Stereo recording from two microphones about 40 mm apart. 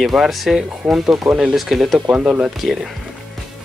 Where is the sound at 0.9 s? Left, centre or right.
Centre.